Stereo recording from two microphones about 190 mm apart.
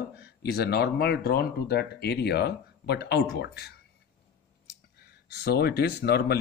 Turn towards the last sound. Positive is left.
turn(degrees=55)  # may be behind; listen again after turning